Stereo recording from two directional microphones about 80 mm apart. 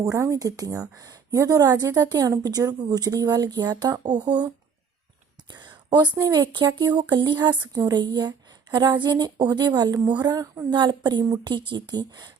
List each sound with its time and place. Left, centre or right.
0.0 s a woman's voice: right
5.5 s a sound: right
6.2 s a woman's voice: right
7.6 s a woman's voice: right
10.7 s speech: right
11.4 s speech: right